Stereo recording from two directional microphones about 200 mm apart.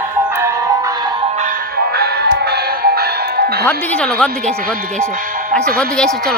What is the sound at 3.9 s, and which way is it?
Speech, 5° left (ahead or behind).